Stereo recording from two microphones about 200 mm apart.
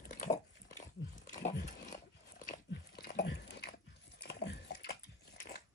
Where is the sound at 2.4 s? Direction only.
45° left (ahead or behind).